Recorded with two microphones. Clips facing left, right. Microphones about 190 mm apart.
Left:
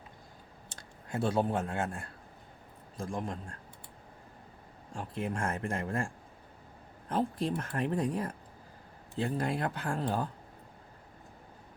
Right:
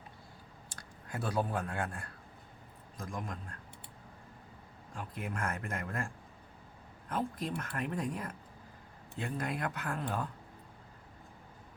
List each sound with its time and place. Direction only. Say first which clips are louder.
0.7 s speech: left 5 dB; 25° left (ahead or behind)
4.9 s speech: left 5 dB; 30° left (ahead or behind)
7.1 s speech: left 5 dB; 30° left (ahead or behind)